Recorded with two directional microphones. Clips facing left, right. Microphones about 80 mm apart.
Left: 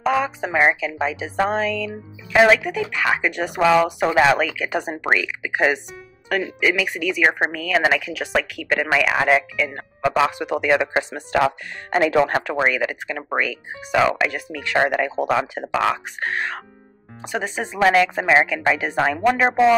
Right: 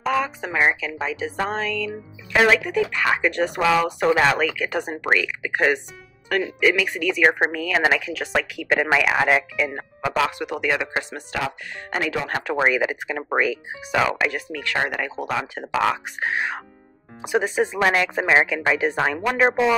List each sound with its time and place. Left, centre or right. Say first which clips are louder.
0.0 s a woman's voice: left 2 dB; centre
9.6 s speech: left 2 dB; centre
10.1 s speech: left 2 dB; left
12.6 s speech: right 1 dB; centre
14.6 s speech: left 6 dB; centre
15.8 s speech: right 1 dB; centre